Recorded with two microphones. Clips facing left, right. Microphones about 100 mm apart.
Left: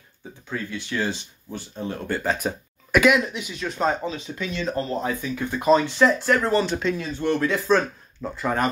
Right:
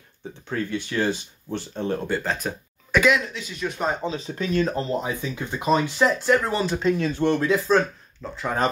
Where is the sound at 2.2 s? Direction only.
10° left (ahead or behind).